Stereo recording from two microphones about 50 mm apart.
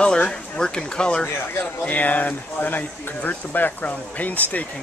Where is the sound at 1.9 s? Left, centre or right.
Left.